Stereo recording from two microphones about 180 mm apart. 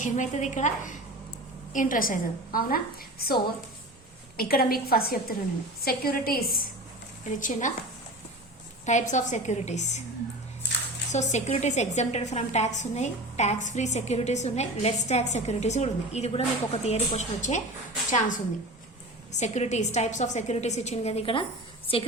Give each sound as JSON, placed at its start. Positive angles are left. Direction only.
{"t": 0.0, "sound": "a woman's voice", "side_deg": 45}
{"t": 4.4, "sound": "a woman's voice", "side_deg": 55}
{"t": 7.3, "sound": "a woman's voice", "side_deg": 45}
{"t": 8.9, "sound": "a woman's voice", "side_deg": 40}
{"t": 11.1, "sound": "a woman's voice", "side_deg": 40}
{"t": 19.4, "sound": "a woman's voice", "side_deg": 40}